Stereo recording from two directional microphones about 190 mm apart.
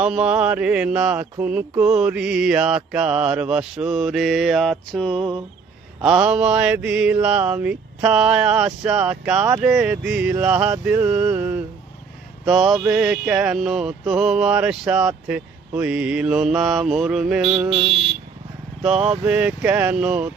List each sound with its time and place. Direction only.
0.0 s mantra: 5° right (ahead or behind)
17.6 s a sound: 30° right (ahead or behind)
19.2 s mantra: 5° right (ahead or behind)